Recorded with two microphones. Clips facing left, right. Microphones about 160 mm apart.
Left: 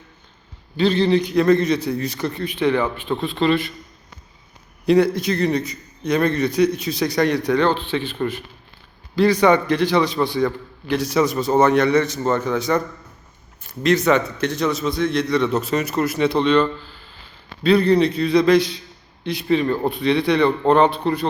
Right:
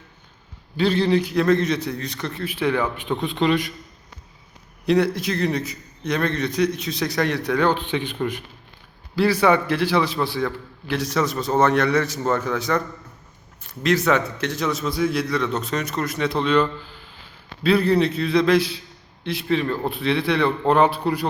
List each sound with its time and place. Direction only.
0.8 s a man's voice: 10° right (ahead or behind)
4.9 s a man's voice: centre (ahead or behind)